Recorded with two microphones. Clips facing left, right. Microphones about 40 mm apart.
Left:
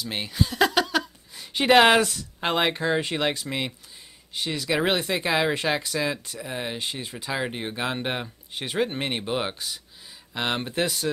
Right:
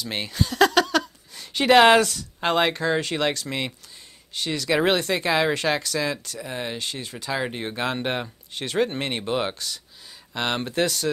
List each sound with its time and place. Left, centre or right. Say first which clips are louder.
0.0 s speech: right 1 dB; centre
0.3 s a sound: right 3 dB; centre
2.0 s speech: right 2 dB; centre
4.6 s speech: right 3 dB; centre
6.4 s speech: even; centre
6.8 s speech: even; centre
7.2 s speech: right 2 dB; centre